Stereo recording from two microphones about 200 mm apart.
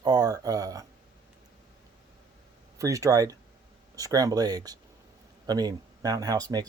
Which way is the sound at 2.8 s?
15° right (ahead or behind).